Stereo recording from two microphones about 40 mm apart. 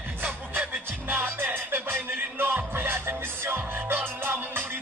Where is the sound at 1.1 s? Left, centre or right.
Right.